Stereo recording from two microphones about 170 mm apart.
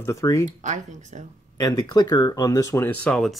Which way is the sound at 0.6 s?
45° right (ahead or behind).